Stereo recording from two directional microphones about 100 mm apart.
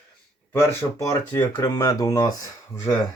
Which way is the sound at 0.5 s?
30° left (ahead or behind).